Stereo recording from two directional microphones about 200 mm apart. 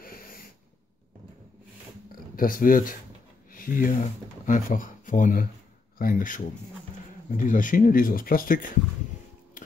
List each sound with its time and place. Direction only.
0.0 s snort: 45° left (ahead or behind)
2.3 s speech: 45° left (ahead or behind)
9.6 s mechanisms: 40° left (ahead or behind)